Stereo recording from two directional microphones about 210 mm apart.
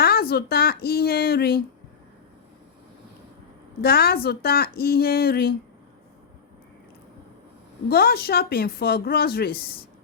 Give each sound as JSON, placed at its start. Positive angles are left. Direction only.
{"t": 0.0, "sound": "speech", "side_deg": 45}
{"t": 3.8, "sound": "speech", "side_deg": 50}
{"t": 7.9, "sound": "speech", "side_deg": 45}